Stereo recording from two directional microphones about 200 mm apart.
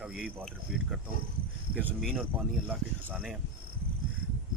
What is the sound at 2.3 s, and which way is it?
Speech, 10° right (ahead or behind).